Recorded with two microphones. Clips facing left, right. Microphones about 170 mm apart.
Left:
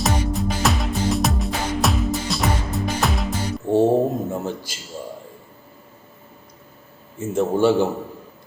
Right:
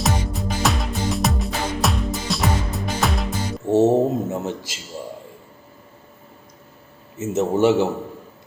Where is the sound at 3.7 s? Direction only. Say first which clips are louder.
Right 1 dB; 25° right (ahead or behind).